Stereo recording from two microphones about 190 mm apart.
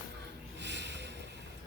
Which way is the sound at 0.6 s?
65° right (ahead or behind).